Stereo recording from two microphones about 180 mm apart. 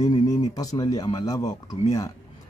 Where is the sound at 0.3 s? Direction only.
20° left (ahead or behind).